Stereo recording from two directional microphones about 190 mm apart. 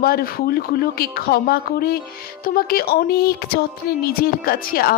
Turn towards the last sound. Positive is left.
turn(degrees=50)  # may be behind; listen again after turning